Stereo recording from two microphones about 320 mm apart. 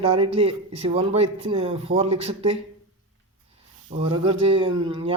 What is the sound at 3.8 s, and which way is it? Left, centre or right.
Speech, centre.